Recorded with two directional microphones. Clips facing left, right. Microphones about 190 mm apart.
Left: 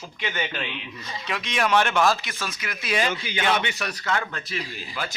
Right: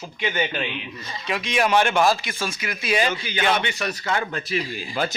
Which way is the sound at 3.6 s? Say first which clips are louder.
Right 2 dB; 5° left (ahead or behind).